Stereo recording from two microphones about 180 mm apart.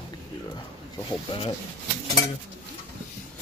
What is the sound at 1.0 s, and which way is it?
Speech, 30° left (ahead or behind).